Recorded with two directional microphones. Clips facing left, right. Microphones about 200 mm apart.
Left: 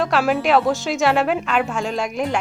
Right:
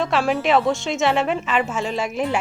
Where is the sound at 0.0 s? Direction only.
Centre (ahead or behind).